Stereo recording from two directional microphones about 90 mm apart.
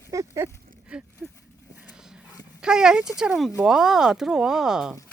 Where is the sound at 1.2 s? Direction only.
5° right (ahead or behind).